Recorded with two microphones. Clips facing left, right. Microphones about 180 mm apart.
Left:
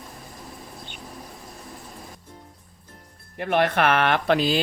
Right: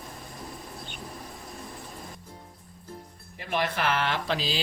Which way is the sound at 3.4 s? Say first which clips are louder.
Left 8 dB; 60° left (ahead or behind).